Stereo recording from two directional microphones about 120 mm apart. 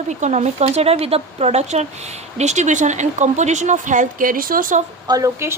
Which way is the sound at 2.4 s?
80° right.